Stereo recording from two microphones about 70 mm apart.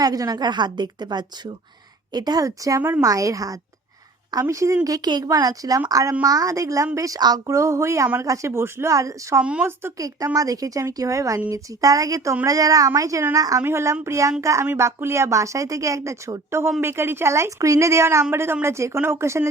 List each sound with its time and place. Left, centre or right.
0.0 s a woman's voice: right
2.1 s a woman's voice: right
2.4 s a woman's voice: right
5.9 s a woman's voice: right
7.2 s a woman's voice: right
9.4 s speech: centre
10.0 s a woman's voice: right
13.6 s a woman's voice: right